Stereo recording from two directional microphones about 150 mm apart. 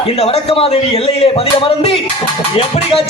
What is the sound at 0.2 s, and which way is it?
Music, 40° left (ahead or behind).